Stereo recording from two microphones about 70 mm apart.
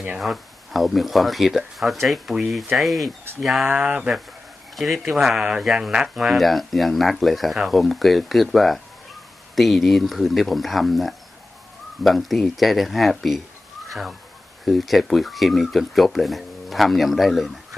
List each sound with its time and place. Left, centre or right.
0.2 s speech: centre
3.6 s speech: centre
4.7 s speech: centre